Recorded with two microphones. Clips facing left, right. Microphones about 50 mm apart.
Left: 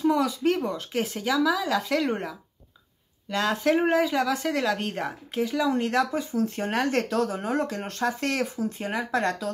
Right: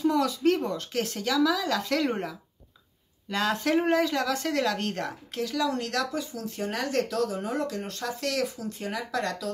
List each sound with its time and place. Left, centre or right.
0.0 s speech: centre; by 6.4 s left
6.4 s speech: left